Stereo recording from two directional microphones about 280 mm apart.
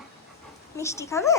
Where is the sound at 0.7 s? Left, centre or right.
Centre.